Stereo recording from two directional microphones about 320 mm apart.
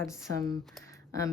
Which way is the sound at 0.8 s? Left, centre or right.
Centre.